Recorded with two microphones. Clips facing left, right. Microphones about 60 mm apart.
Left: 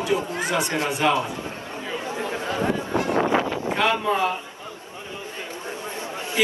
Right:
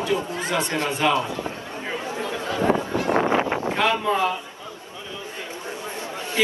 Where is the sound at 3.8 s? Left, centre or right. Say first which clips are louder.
Even; centre.